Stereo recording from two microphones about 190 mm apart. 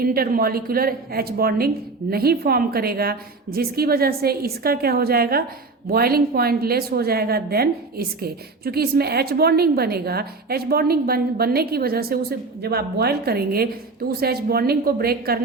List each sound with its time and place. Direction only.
0.0 s a woman's voice: 50° right (ahead or behind)